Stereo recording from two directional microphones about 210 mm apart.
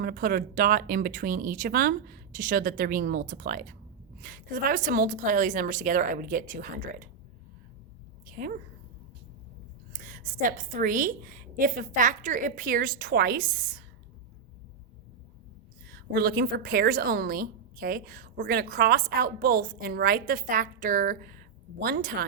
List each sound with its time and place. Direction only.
0.0 s a woman's voice: 45° right (ahead or behind)
8.3 s a sound: 40° right (ahead or behind)
9.9 s a woman's voice: 40° right (ahead or behind)
15.9 s a woman's voice: 50° right (ahead or behind)